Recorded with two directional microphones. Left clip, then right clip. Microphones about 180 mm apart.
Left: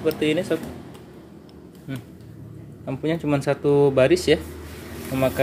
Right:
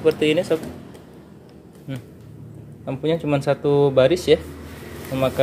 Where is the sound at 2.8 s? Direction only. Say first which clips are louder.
Right 3 dB; 5° right (ahead or behind).